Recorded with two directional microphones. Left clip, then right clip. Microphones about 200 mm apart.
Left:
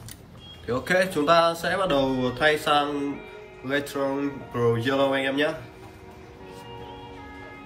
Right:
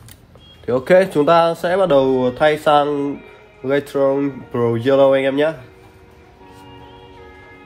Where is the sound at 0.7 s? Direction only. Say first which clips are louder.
Right 10 dB; 45° right (ahead or behind).